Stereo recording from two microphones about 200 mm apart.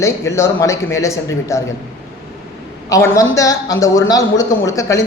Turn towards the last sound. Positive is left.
turn(degrees=15)  # may be behind; listen again after turning